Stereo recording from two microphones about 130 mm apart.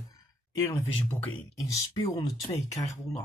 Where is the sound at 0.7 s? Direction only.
20° left (ahead or behind).